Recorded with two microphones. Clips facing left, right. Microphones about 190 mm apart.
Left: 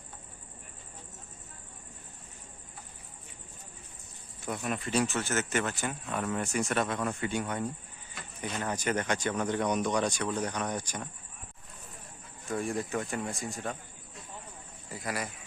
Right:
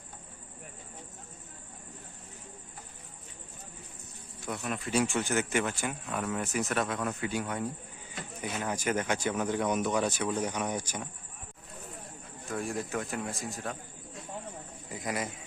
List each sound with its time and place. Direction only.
4.4 s speech: centre (ahead or behind)
4.9 s speech: 10° right (ahead or behind)
12.5 s speech: centre (ahead or behind)
14.8 s a man's voice: 20° right (ahead or behind)